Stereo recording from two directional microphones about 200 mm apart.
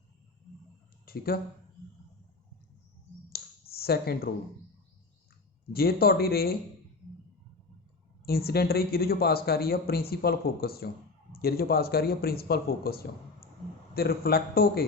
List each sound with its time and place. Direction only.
1.0 s speech: 50° left (ahead or behind)
3.3 s a sound: 50° left (ahead or behind)
5.7 s speech: 50° left (ahead or behind)
8.2 s speech: 50° left (ahead or behind)